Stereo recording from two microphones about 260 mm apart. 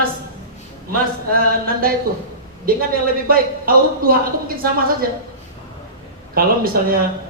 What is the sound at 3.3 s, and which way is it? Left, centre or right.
Speech, right.